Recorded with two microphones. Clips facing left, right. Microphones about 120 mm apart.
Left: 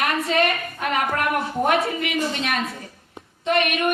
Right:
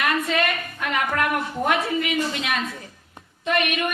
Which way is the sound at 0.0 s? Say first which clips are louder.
Left 2 dB; 30° left (ahead or behind).